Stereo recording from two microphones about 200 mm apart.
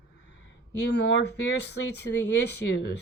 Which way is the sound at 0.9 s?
60° left (ahead or behind).